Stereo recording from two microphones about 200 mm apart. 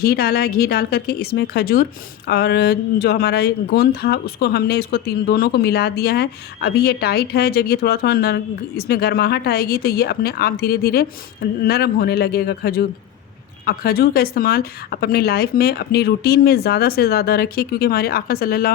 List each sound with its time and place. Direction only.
0.0 s speech: 50° left (ahead or behind)